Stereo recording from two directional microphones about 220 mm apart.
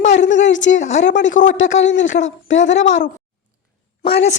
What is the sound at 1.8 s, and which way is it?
A man's voice, 55° left (ahead or behind).